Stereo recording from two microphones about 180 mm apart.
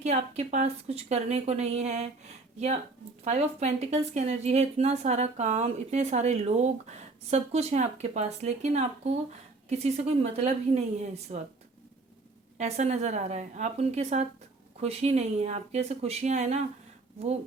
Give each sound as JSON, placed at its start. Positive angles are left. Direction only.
{"t": 0.0, "sound": "speech", "side_deg": -40}
{"t": 3.2, "sound": "speech", "side_deg": -35}
{"t": 12.5, "sound": "speech", "side_deg": -40}